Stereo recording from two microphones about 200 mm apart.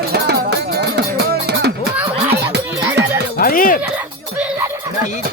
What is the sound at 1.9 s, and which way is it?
Fowl, 10° right (ahead or behind).